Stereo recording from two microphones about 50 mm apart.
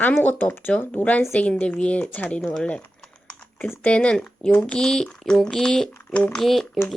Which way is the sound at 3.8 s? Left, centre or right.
Left.